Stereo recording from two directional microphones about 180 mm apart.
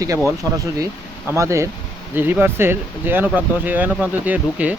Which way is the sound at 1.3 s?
15° right (ahead or behind).